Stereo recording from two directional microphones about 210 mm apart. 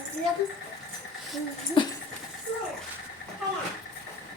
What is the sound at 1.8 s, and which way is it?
Patter, 20° left (ahead or behind).